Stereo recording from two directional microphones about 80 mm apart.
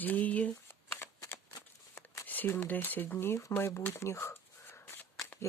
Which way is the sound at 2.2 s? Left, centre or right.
Left.